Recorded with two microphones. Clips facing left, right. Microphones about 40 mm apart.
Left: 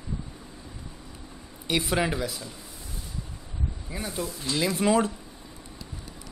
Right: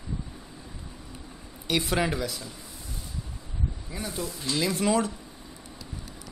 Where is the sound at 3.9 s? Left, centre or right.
Centre.